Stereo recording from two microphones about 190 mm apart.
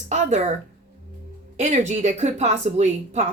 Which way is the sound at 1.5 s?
40° right (ahead or behind).